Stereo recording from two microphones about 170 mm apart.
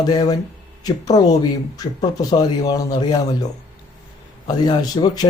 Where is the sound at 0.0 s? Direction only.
25° left (ahead or behind).